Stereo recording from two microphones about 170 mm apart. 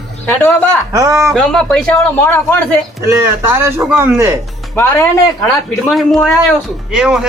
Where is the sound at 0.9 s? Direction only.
20° right (ahead or behind).